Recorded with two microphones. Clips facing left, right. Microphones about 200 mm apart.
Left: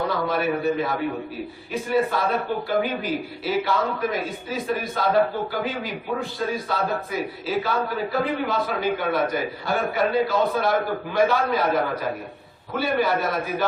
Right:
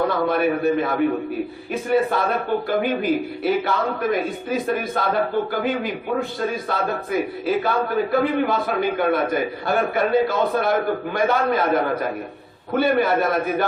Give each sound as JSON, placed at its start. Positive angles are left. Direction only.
{"t": 0.1, "sound": "a man's voice", "side_deg": -55}